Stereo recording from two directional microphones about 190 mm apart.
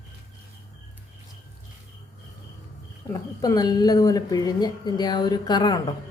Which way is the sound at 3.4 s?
20° left (ahead or behind).